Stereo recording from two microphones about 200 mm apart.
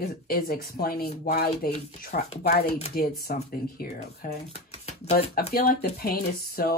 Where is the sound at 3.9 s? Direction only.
30° left (ahead or behind).